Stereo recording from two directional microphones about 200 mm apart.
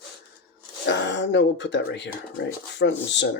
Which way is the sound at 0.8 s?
65° left (ahead or behind).